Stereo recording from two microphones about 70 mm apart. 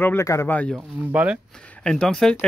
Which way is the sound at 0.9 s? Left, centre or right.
Right.